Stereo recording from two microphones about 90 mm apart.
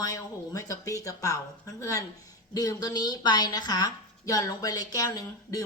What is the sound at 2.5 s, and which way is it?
A woman's voice, 45° left (ahead or behind).